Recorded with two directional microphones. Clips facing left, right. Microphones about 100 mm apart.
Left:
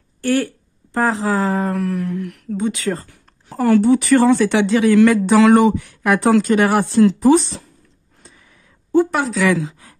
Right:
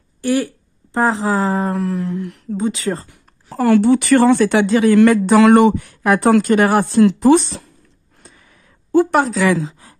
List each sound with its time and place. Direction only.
0.2 s speech: 15° right (ahead or behind)
3.5 s speech: 85° right; by 5.8 s 60° right (ahead or behind)
5.8 s speech: 40° right (ahead or behind)
7.2 s speech: 70° right (ahead or behind)
9.3 s a woman's voice: 30° right (ahead or behind)